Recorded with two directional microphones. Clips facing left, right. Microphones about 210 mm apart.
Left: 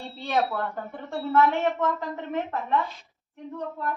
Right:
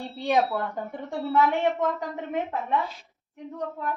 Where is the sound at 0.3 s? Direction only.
15° right (ahead or behind).